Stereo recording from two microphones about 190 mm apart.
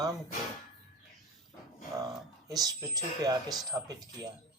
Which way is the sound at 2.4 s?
20° right (ahead or behind).